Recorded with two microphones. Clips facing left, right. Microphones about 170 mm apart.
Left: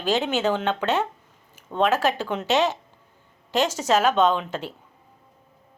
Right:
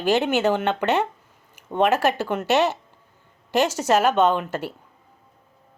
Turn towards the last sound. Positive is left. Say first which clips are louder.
# right 1 dB
turn(degrees=-10)  # may be behind; listen again after turning